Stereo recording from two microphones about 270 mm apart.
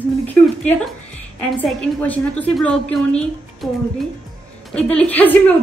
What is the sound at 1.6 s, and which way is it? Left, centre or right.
Speech, centre.